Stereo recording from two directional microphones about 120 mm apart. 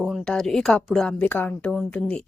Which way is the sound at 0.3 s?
5° left (ahead or behind).